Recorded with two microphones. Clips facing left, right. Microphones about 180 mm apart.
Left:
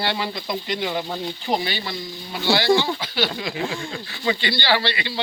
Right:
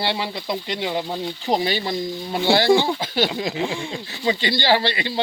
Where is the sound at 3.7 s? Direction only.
20° right (ahead or behind).